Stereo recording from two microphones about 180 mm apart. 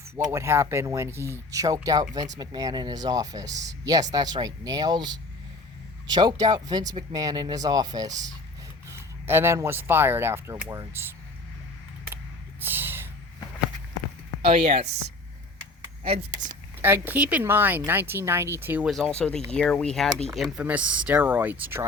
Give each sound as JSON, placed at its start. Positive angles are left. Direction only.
{"t": 0.3, "sound": "speech", "side_deg": -15}
{"t": 12.1, "sound": "a sound", "side_deg": -10}
{"t": 14.4, "sound": "speech", "side_deg": -35}
{"t": 16.8, "sound": "speech", "side_deg": -10}
{"t": 18.9, "sound": "speech", "side_deg": 0}